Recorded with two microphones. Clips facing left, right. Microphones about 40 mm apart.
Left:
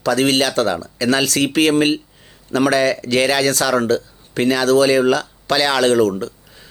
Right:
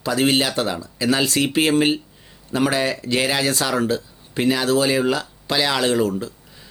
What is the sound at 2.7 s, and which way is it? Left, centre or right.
Speech, left.